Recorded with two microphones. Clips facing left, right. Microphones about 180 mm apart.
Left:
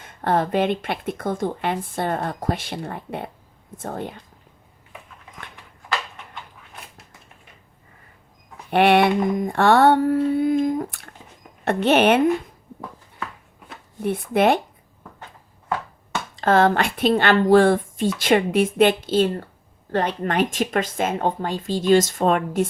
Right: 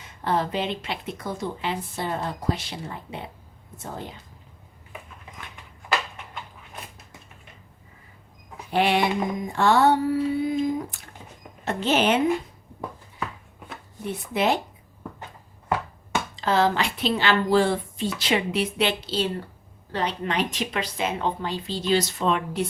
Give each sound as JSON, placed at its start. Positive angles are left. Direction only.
{"t": 0.0, "sound": "speech", "side_deg": 55}
{"t": 3.8, "sound": "mantra", "side_deg": 55}
{"t": 8.7, "sound": "mantra", "side_deg": 60}
{"t": 14.0, "sound": "mantra", "side_deg": 55}
{"t": 16.3, "sound": "speech", "side_deg": 55}